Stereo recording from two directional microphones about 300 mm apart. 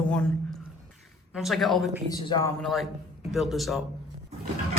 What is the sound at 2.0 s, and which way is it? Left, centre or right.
Speech, centre.